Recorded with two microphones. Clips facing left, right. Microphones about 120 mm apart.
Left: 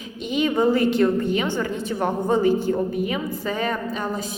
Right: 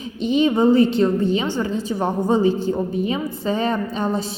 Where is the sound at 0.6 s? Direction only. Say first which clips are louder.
Right 3 dB; 20° right (ahead or behind).